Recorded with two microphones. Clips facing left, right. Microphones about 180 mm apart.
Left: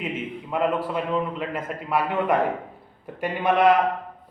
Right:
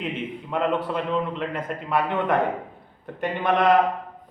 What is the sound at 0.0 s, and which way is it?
A man's voice, 5° left (ahead or behind).